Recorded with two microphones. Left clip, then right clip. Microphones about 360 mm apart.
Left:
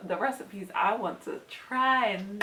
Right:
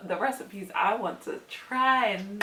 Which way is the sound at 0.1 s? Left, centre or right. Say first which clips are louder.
Right 1 dB; centre.